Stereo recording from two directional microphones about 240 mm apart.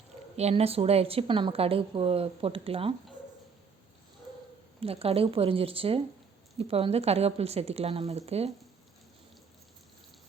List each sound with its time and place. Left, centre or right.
0.3 s speech: right
4.8 s speech: right